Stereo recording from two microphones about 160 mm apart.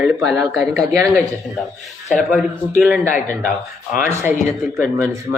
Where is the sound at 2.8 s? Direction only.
15° right (ahead or behind).